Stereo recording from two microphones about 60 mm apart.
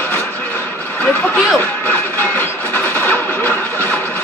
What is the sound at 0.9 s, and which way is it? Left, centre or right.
Music, left.